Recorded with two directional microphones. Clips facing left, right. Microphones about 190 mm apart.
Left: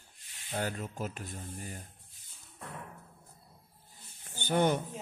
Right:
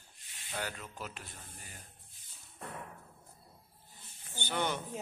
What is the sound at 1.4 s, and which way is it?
Speech, 35° left (ahead or behind).